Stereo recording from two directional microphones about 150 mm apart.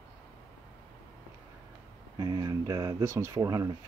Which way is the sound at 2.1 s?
25° right (ahead or behind).